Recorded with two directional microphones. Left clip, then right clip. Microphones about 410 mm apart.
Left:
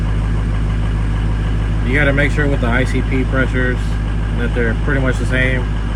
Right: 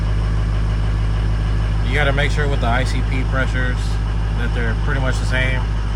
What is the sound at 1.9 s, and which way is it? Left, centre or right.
Speech, centre.